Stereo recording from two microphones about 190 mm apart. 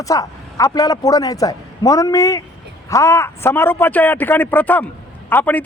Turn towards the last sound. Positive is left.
turn(degrees=10)  # may be behind; listen again after turning